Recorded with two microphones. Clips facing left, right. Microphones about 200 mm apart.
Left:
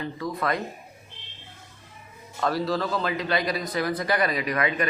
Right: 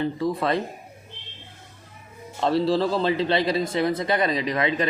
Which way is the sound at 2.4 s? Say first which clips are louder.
Right 5 dB; 25° right (ahead or behind).